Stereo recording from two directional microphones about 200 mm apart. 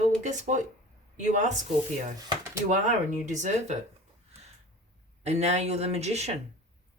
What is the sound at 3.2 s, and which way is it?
Speech, 35° right (ahead or behind).